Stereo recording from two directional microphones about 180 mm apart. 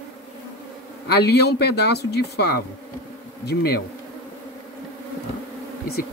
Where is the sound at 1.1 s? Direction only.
65° left (ahead or behind).